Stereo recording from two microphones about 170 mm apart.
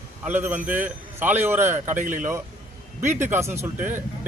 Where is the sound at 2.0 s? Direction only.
50° right (ahead or behind).